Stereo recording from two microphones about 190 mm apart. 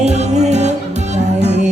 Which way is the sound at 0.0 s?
35° right (ahead or behind).